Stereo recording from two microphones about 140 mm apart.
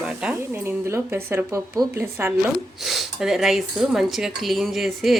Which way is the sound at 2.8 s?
Centre (ahead or behind).